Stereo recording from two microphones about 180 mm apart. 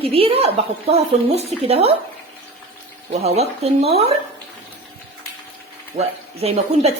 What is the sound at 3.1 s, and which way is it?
A woman's voice, 35° right (ahead or behind).